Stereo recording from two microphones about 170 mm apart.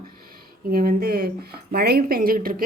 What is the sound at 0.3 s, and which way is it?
Speech, 60° right (ahead or behind).